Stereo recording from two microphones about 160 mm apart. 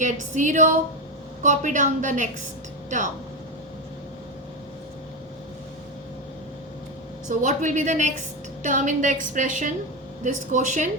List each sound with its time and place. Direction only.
0.0 s a woman's voice: 50° right (ahead or behind)
7.3 s a woman's voice: 50° right (ahead or behind)